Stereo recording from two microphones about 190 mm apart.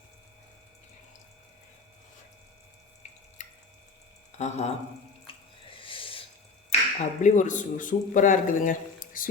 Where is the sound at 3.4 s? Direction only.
40° left (ahead or behind).